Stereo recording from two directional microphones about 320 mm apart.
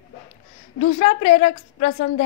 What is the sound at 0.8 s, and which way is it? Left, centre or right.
A woman's voice, centre.